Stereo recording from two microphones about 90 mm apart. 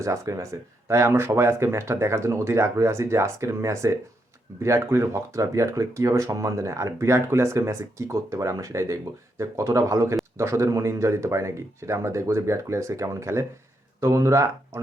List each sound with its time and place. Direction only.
0.0 s speech: 35° right (ahead or behind)